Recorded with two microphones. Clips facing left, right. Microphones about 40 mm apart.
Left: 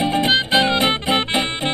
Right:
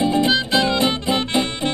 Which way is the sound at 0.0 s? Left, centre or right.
Left.